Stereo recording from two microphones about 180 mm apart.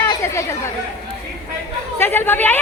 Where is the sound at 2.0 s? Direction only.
10° left (ahead or behind).